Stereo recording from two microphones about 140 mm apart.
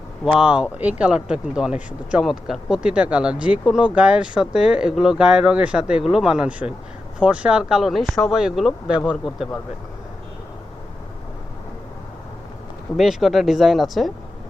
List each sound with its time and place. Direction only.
0.3 s speech: 5° right (ahead or behind)
13.0 s speech: centre (ahead or behind)